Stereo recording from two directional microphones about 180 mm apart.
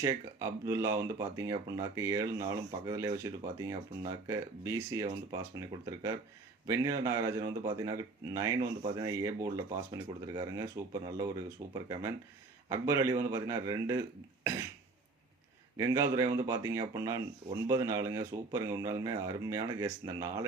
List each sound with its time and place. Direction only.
0.0 s speech: 15° right (ahead or behind)
12.6 s speech: 15° right (ahead or behind)
15.8 s speech: 15° right (ahead or behind)